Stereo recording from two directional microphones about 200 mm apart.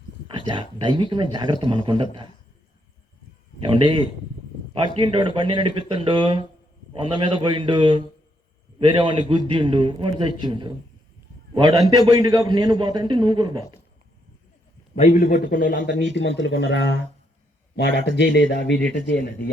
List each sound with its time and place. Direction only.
0.3 s a sound: 25° right (ahead or behind)
0.8 s a man's voice: 25° right (ahead or behind)
3.6 s a man's voice: 25° right (ahead or behind)
14.9 s a man's voice: 35° left (ahead or behind)
16.1 s speech: 60° left (ahead or behind)
17.7 s speech: 60° left (ahead or behind)